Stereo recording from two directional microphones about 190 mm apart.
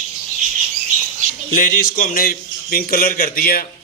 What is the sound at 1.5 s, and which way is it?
A man's voice, 45° left (ahead or behind).